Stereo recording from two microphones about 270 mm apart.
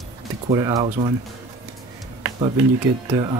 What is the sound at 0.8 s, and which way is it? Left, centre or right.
Speech, right.